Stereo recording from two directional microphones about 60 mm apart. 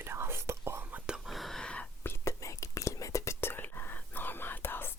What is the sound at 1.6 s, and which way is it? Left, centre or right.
Whispering, centre.